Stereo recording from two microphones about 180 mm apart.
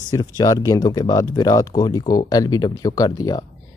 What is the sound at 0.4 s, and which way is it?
Speech, 20° left (ahead or behind).